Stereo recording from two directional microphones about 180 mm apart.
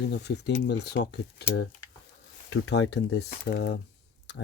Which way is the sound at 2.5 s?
85° left.